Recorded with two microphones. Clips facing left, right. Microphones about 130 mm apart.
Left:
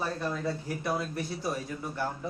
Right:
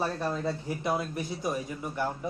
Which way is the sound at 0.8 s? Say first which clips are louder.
Right 1 dB; 20° right (ahead or behind).